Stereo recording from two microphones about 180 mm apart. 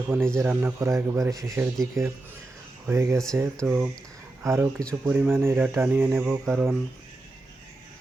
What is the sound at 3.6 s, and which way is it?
Speech, 10° right (ahead or behind).